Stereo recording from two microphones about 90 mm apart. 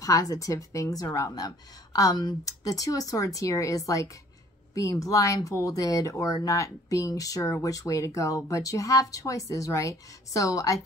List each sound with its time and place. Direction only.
0.0 s a woman's voice: 40° left (ahead or behind)